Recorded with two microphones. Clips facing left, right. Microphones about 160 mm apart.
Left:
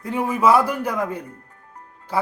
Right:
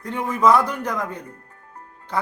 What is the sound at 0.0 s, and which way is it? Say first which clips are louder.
A man's voice: even; 10° left (ahead or behind).